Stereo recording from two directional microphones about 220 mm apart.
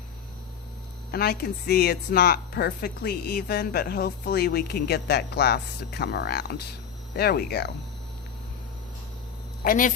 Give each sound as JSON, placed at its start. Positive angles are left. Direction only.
{"t": 1.1, "sound": "a woman's voice", "side_deg": 45}
{"t": 9.6, "sound": "speech", "side_deg": 40}